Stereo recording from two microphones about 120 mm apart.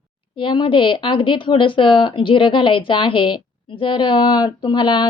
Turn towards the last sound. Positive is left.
turn(degrees=40)  # may be behind; listen again after turning